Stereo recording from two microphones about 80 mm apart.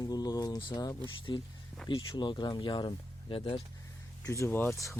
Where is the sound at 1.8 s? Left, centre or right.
Centre.